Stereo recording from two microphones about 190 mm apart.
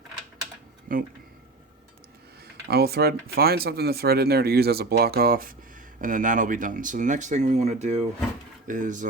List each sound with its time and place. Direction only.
0.9 s speech: 45° right (ahead or behind)
2.6 s speech: 55° right (ahead or behind)